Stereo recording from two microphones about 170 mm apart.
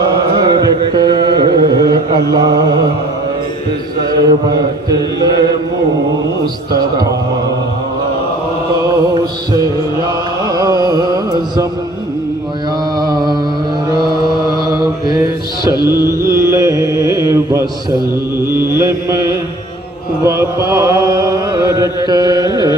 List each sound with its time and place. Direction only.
0.4 s carnatic music: 25° right (ahead or behind)
2.3 s chant: 25° right (ahead or behind)
4.1 s chant: 25° right (ahead or behind)
6.7 s chant: 25° right (ahead or behind)
8.8 s music: 20° right (ahead or behind)
13.0 s a sound: 25° right (ahead or behind)
14.4 s mantra: 25° right (ahead or behind)
15.7 s music: 25° left (ahead or behind)
16.2 s mantra: 20° right (ahead or behind)
20.2 s chant: 20° right (ahead or behind)